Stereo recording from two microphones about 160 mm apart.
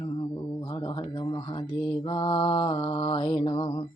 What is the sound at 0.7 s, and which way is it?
Mantra, 30° left (ahead or behind).